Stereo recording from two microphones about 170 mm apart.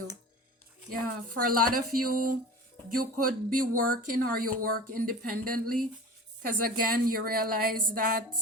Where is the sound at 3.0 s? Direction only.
55° right (ahead or behind).